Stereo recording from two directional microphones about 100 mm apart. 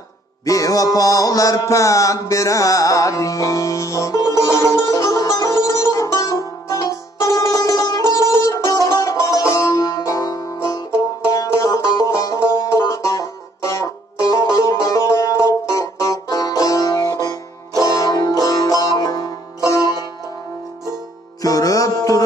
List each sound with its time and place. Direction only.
0.5 s music: 35° left (ahead or behind)
21.4 s music: 35° left (ahead or behind)